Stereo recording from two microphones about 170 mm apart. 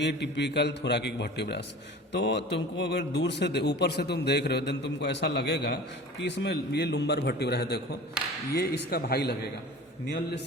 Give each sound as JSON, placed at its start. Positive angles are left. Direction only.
{"t": 0.0, "sound": "a man's voice", "side_deg": 90}
{"t": 2.1, "sound": "a man's voice", "side_deg": 90}